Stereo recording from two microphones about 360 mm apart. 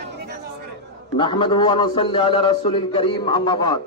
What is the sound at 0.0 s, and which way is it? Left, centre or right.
Chatter, right.